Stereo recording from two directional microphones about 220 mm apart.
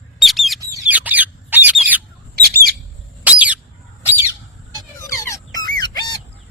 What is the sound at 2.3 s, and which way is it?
Bird, 45° right (ahead or behind).